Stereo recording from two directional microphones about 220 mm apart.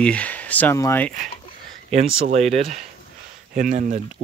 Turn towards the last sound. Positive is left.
turn(degrees=-35)  # may be behind; listen again after turning